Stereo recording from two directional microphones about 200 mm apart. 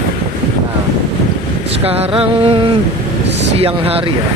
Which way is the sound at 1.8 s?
30° right (ahead or behind).